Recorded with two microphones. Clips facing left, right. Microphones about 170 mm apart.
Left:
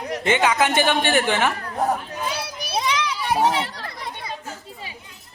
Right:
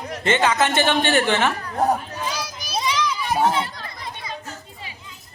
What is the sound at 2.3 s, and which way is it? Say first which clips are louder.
Children playing: left 3 dB; 60° left (ahead or behind).